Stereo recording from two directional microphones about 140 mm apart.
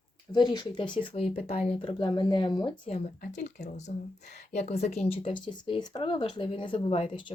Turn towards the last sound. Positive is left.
turn(degrees=35)  # may be behind; listen again after turning